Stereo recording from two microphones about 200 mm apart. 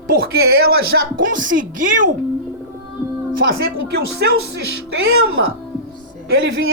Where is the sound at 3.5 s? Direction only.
50° right (ahead or behind).